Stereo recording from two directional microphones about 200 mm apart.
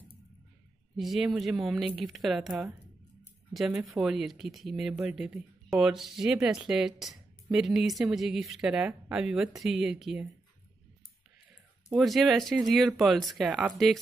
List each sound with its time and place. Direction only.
0.9 s speech: centre (ahead or behind)
11.9 s speech: centre (ahead or behind)